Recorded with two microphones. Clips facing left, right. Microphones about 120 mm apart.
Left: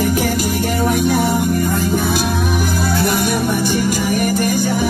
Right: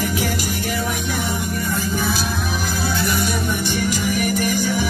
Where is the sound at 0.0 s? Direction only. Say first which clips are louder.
Left 6 dB; 45° left (ahead or behind).